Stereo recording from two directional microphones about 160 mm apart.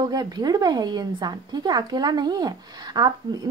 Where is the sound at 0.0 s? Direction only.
25° right (ahead or behind).